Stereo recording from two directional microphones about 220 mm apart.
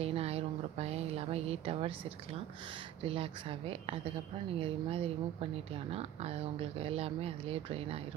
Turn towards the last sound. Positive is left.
turn(degrees=-25)  # may be behind; listen again after turning